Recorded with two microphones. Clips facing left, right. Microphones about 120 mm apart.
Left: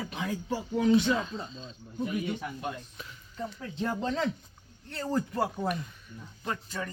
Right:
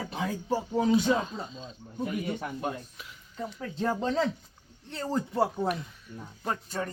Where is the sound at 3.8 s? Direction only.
35° right (ahead or behind).